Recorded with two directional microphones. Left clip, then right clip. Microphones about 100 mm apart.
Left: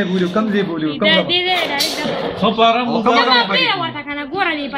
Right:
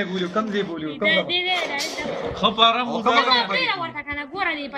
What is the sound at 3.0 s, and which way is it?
Speech, 35° right (ahead or behind).